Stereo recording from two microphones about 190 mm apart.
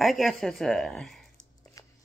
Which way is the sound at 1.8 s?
15° left (ahead or behind).